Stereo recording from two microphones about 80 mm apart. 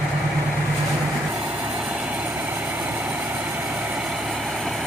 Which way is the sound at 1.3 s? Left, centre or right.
Centre.